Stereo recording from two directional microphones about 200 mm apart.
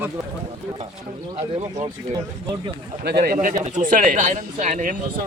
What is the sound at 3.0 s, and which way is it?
Speech, 50° right (ahead or behind).